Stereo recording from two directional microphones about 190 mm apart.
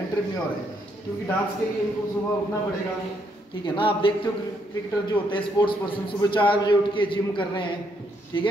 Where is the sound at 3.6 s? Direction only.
25° left (ahead or behind).